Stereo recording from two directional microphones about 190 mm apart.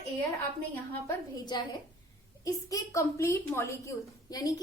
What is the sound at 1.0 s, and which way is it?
A woman's voice, 25° left (ahead or behind).